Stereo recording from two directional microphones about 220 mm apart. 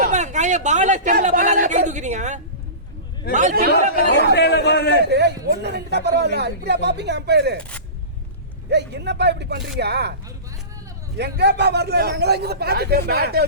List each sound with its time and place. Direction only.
0.0 s speech: 35° right (ahead or behind)
4.4 s a man's voice: 50° left (ahead or behind)
5.0 s speech: 50° right (ahead or behind)
8.7 s speech: 50° right (ahead or behind)
11.2 s speech: 50° right (ahead or behind)